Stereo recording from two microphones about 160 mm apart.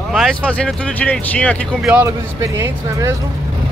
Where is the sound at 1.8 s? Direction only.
10° right (ahead or behind).